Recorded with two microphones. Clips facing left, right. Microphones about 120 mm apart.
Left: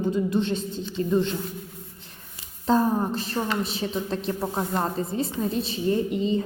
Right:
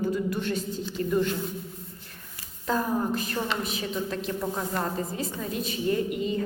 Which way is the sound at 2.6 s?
30° left (ahead or behind).